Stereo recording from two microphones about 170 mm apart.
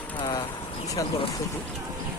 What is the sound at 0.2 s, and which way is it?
Vehicle, 30° left (ahead or behind).